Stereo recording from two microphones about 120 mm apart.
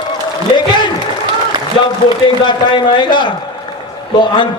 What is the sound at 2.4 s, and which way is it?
A man's voice, 40° left (ahead or behind).